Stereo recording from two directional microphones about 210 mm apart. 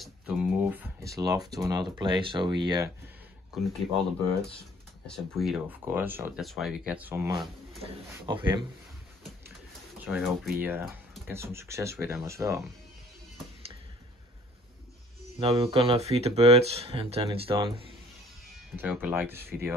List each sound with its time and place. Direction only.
0.0 s speech: 5° right (ahead or behind)
3.5 s speech: centre (ahead or behind)
5.0 s speech: centre (ahead or behind)
8.1 s speech: 20° right (ahead or behind)
10.0 s speech: centre (ahead or behind)
15.4 s speech: 30° right (ahead or behind)
18.8 s speech: 10° right (ahead or behind)